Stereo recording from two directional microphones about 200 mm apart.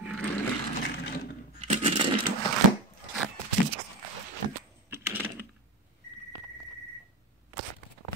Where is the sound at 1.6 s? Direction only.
35° right (ahead or behind).